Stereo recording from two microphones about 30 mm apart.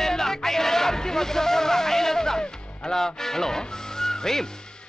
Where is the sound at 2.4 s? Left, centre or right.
Left.